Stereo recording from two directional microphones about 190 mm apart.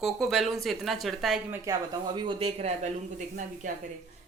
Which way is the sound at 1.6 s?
20° right (ahead or behind).